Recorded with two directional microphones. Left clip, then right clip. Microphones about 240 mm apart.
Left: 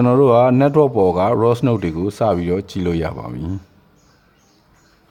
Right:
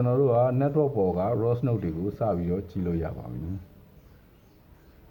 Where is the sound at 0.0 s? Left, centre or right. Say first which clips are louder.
Left 11 dB; left.